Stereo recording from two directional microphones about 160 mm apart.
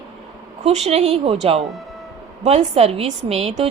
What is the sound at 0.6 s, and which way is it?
A woman's voice, 40° right (ahead or behind).